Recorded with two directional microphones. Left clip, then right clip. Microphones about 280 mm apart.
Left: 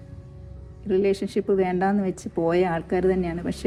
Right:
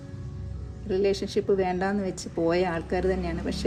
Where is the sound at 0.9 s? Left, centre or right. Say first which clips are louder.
Left 3 dB; centre.